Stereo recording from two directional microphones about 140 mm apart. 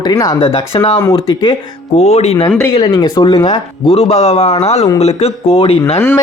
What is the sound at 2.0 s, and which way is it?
Speech, 50° left (ahead or behind).